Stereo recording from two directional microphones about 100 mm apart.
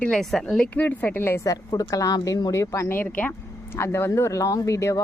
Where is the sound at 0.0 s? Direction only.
5° left (ahead or behind); by 1.4 s 20° left (ahead or behind).